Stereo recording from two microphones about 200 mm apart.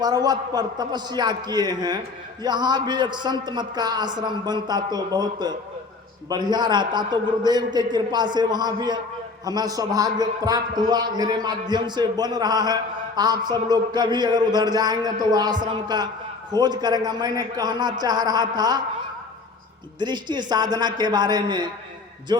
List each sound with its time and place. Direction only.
0.0 s a man's voice: 20° right (ahead or behind)
20.0 s a man's voice: 20° right (ahead or behind)